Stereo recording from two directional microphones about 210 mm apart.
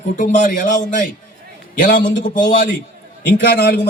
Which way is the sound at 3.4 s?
50° left (ahead or behind).